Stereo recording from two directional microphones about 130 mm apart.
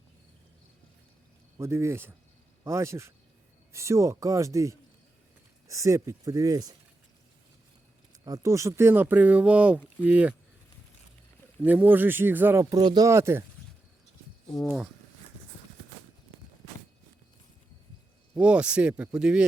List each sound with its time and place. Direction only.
1.5 s speech: 20° right (ahead or behind)
8.2 s speech: 25° right (ahead or behind); by 10.3 s 10° right (ahead or behind)
11.6 s speech: 15° right (ahead or behind)
12.7 s speech: 30° right (ahead or behind)
13.1 s speech: 20° right (ahead or behind)
14.4 s speech: centre (ahead or behind)
18.3 s speech: 10° right (ahead or behind)